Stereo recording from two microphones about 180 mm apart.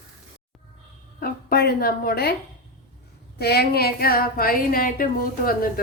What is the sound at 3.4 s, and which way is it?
A woman's voice, 60° left (ahead or behind).